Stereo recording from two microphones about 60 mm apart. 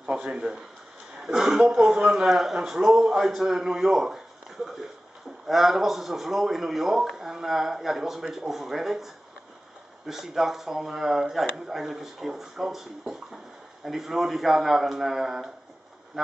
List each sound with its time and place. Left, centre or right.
0.0 s a man's voice: centre
5.5 s a man's voice: centre